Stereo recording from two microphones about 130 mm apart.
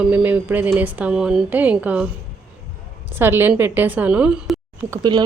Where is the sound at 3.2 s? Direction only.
15° right (ahead or behind).